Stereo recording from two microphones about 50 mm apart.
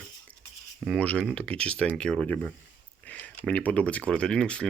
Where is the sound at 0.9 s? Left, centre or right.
Left.